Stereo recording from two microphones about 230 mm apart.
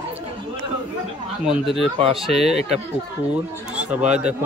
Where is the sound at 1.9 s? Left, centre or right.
Right.